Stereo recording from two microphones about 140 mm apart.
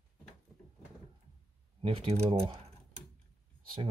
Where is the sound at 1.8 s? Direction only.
45° right (ahead or behind).